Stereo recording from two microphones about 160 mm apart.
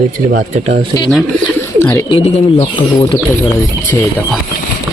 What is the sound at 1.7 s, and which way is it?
Speech, 15° left (ahead or behind).